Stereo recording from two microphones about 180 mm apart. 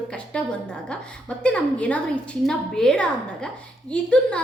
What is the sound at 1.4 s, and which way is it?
A woman's voice, 5° left (ahead or behind).